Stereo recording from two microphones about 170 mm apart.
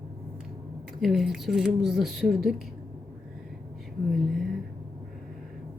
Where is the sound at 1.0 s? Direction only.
Centre (ahead or behind).